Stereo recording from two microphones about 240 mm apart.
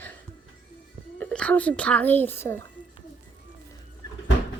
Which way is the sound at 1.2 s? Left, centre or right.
Centre.